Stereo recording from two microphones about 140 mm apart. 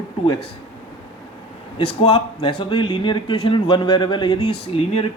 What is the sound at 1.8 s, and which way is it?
Speech, 40° left (ahead or behind).